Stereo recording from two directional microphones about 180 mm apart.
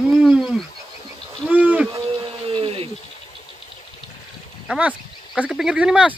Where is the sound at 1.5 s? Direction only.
10° right (ahead or behind).